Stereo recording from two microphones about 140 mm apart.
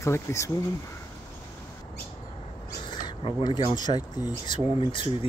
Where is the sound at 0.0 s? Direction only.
20° left (ahead or behind).